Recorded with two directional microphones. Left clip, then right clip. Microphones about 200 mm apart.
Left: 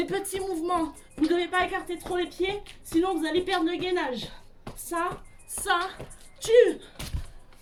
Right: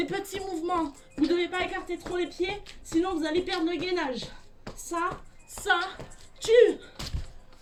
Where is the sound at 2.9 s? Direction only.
10° left (ahead or behind).